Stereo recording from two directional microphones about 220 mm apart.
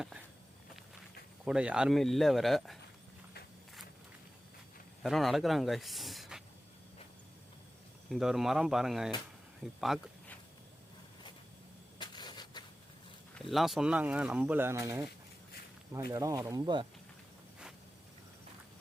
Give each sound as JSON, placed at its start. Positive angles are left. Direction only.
{"t": 1.5, "sound": "speech", "side_deg": -5}
{"t": 5.0, "sound": "speech", "side_deg": 0}
{"t": 8.1, "sound": "speech", "side_deg": 0}
{"t": 9.8, "sound": "a sound", "side_deg": 0}
{"t": 11.9, "sound": "vehicle", "side_deg": 20}
{"t": 13.3, "sound": "speech", "side_deg": 0}